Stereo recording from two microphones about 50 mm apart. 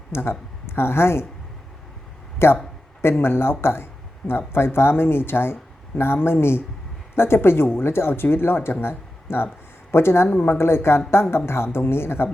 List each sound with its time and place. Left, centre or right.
0.1 s speech: left
2.4 s speech: left
10.2 s speech: left